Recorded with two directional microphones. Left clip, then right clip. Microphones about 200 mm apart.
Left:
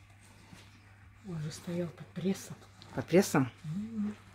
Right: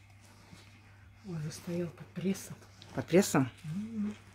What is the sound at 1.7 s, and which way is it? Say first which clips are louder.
Speech: even; 10° right (ahead or behind).